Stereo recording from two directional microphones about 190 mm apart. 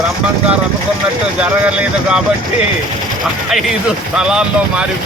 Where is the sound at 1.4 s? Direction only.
5° right (ahead or behind).